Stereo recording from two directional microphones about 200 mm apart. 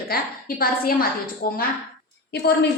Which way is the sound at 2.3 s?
55° left (ahead or behind).